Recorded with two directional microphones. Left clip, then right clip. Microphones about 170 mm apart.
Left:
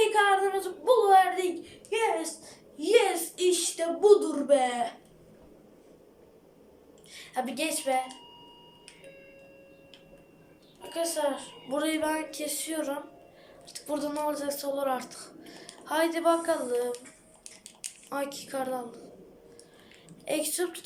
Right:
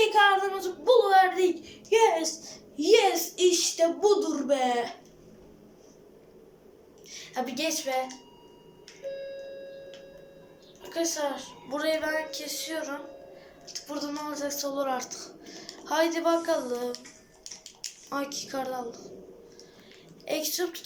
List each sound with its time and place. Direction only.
0.1 s speech: centre (ahead or behind)
1.9 s a woman's voice: 15° right (ahead or behind)
3.8 s speech: centre (ahead or behind)
7.1 s a woman's voice: centre (ahead or behind)
10.8 s a woman's voice: 5° left (ahead or behind)
13.7 s speech: 25° left (ahead or behind)
14.1 s speech: 10° left (ahead or behind)
18.1 s speech: centre (ahead or behind)
20.2 s speech: centre (ahead or behind)